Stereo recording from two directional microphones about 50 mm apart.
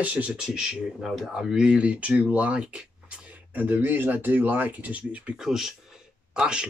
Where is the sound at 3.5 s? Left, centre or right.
Right.